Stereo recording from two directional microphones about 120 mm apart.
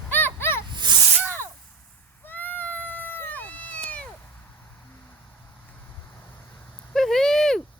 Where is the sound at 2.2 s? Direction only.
15° left (ahead or behind).